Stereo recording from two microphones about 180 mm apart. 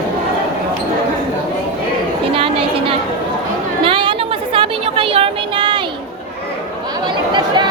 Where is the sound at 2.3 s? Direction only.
30° right (ahead or behind).